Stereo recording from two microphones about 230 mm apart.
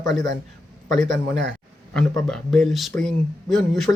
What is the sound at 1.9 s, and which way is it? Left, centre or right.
Speech, centre.